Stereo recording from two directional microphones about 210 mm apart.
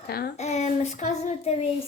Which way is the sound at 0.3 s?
30° left (ahead or behind).